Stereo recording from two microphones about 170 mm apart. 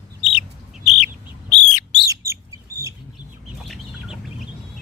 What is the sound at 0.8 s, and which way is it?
Bird, 40° left (ahead or behind).